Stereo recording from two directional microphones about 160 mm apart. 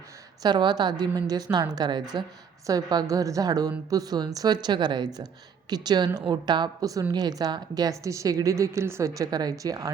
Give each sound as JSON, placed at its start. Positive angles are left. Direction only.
{"t": 0.4, "sound": "a woman's voice", "side_deg": -25}